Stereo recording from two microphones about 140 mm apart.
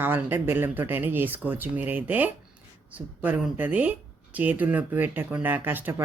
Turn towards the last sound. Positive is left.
turn(degrees=-15)  # may be behind; listen again after turning